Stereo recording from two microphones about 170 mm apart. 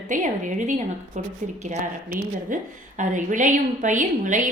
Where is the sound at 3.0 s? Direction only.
45° right (ahead or behind).